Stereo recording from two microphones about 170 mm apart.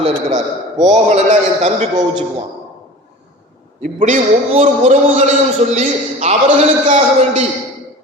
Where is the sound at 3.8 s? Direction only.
45° right (ahead or behind).